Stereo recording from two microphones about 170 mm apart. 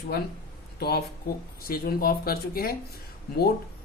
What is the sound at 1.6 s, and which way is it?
Speech, 60° left (ahead or behind).